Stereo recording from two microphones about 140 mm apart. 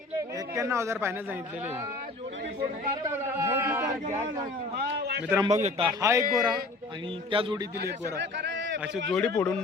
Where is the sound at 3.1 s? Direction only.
15° right (ahead or behind).